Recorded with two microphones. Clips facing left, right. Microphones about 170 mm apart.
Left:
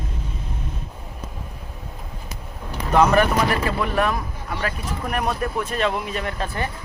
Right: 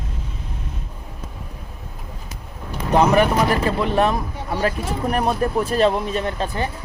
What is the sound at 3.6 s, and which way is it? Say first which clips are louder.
Speech: right 3 dB; 25° right (ahead or behind).